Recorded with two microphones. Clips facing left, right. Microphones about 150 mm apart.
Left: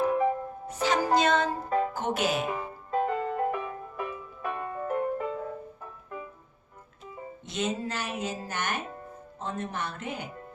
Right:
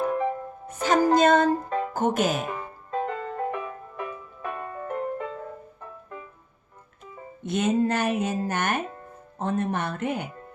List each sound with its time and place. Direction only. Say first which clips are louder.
0.0 s music: left 1 dB; 5° left (ahead or behind)
0.7 s music: right 5 dB; 45° right (ahead or behind)
1.9 s speech: right 4 dB; 45° right (ahead or behind)
2.4 s music: left 1 dB; 5° left (ahead or behind)
7.4 s speech: right 8 dB; 55° right (ahead or behind)